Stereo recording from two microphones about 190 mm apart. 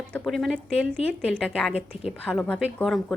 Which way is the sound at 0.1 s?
Centre (ahead or behind).